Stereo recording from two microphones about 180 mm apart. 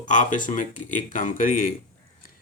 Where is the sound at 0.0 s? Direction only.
45° left (ahead or behind).